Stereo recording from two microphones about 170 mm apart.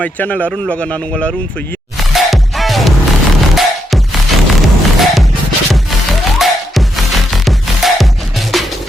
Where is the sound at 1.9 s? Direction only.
Centre (ahead or behind).